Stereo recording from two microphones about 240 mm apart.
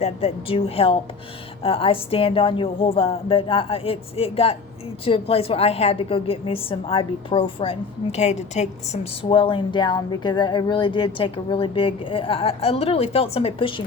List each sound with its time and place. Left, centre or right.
0.0 s a woman's voice: left